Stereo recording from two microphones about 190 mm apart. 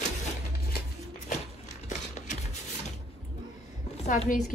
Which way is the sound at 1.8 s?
40° left (ahead or behind).